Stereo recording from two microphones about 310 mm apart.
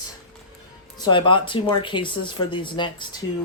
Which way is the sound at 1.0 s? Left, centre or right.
Centre.